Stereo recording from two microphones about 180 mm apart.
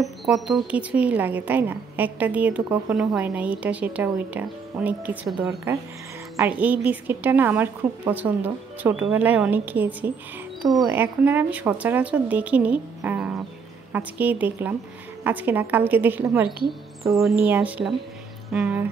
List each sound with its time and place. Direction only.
0.0 s speech: centre (ahead or behind)
17.2 s speech: centre (ahead or behind)